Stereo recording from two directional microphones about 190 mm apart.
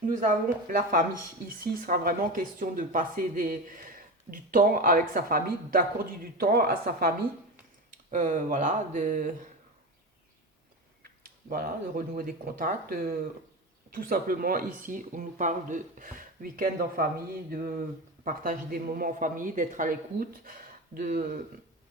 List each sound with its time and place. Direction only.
0.7 s speech: 50° right (ahead or behind)
11.4 s speech: 50° right (ahead or behind)